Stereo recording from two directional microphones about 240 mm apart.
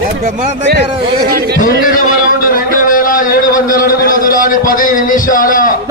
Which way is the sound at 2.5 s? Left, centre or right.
Left.